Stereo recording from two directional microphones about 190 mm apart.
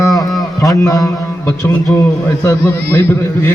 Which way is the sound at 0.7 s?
15° left (ahead or behind).